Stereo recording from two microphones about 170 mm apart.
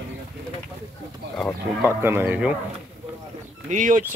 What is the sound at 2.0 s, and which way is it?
Speech, 15° right (ahead or behind).